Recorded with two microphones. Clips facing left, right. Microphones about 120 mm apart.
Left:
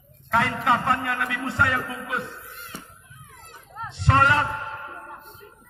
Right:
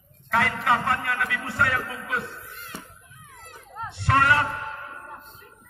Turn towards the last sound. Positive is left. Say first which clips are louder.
# left 1 dB
turn(degrees=25)  # may be behind; listen again after turning